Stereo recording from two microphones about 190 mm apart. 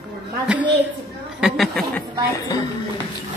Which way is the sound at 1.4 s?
Centre (ahead or behind).